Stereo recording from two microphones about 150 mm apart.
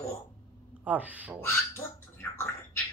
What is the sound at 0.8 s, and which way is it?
Speech, 10° right (ahead or behind).